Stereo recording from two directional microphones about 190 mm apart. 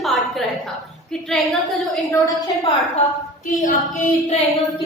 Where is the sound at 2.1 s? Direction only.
20° left (ahead or behind).